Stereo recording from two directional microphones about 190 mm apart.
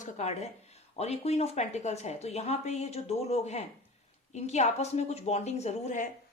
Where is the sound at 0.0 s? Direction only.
35° left (ahead or behind).